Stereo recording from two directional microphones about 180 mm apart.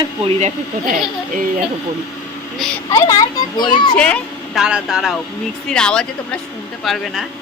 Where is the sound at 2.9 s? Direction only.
20° left (ahead or behind).